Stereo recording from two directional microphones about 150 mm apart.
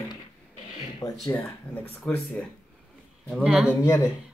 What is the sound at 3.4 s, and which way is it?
Speech, 5° right (ahead or behind).